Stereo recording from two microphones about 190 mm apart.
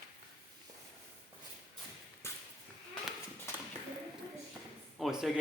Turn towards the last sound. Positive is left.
turn(degrees=-5)  # may be behind; listen again after turning